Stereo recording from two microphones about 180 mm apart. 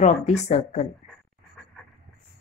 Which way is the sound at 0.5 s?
40° left (ahead or behind).